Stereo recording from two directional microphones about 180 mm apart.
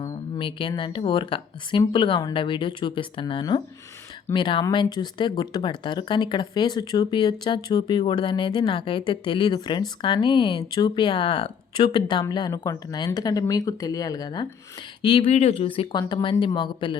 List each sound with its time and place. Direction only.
0.0 s speech: 25° left (ahead or behind)
15.3 s speech: 35° left (ahead or behind)